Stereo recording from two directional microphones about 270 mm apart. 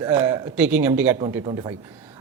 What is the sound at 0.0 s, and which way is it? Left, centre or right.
A man's voice, centre.